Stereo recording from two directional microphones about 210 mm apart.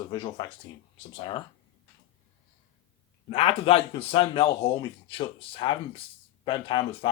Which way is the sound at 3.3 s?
30° left (ahead or behind).